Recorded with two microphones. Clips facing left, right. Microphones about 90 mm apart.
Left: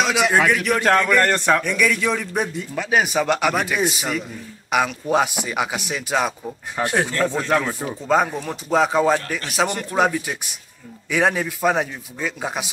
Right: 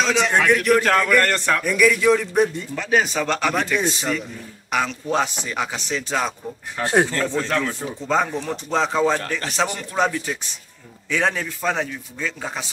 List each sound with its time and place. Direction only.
0.0 s speech: 10° left (ahead or behind)
1.3 s a man's voice: 15° left (ahead or behind)
1.6 s a man's voice: centre (ahead or behind)
6.9 s speech: 30° right (ahead or behind)
7.2 s a man's voice: 15° left (ahead or behind)